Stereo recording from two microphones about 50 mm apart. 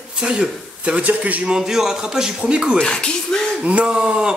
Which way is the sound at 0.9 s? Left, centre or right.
Right.